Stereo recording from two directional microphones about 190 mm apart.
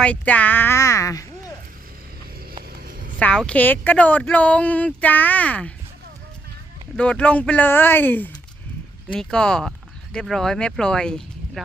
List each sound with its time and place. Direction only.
0.0 s speech: 10° left (ahead or behind)
2.7 s a sound: 55° right (ahead or behind)
3.2 s speech: 5° left (ahead or behind)
6.9 s speech: 5° left (ahead or behind)